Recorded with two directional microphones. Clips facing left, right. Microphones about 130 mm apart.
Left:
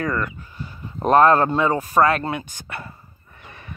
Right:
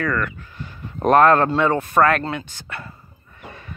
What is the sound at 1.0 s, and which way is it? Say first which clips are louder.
Speech: right 1 dB; 35° left (ahead or behind).